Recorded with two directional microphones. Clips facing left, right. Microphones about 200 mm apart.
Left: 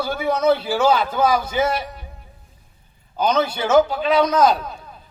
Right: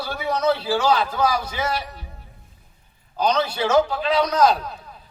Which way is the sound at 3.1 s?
25° left (ahead or behind).